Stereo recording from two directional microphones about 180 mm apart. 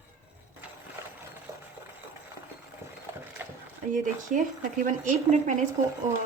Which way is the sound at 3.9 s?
45° right (ahead or behind).